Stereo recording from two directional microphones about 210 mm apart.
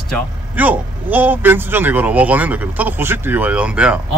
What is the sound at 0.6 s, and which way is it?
Speech, 10° right (ahead or behind).